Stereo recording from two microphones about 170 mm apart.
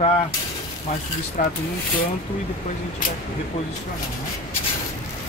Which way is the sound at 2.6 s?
40° left (ahead or behind).